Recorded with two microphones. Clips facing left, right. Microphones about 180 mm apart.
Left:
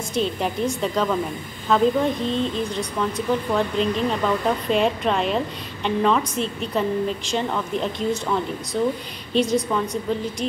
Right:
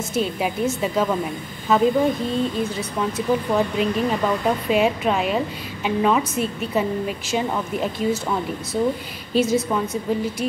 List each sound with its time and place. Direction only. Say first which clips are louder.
0.1 s a woman's voice: even; 5° right (ahead or behind)